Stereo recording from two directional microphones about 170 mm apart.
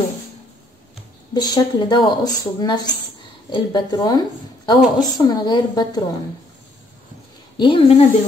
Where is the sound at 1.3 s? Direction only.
25° left (ahead or behind).